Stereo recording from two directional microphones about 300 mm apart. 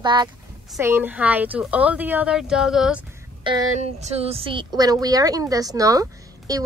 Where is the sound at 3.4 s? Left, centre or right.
Centre.